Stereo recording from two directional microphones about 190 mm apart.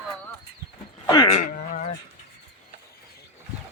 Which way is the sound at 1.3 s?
40° left (ahead or behind).